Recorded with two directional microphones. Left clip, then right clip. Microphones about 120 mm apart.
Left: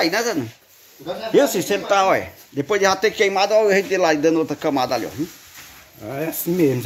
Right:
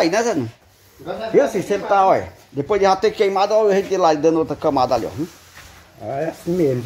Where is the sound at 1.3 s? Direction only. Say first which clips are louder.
Even; 30° left (ahead or behind).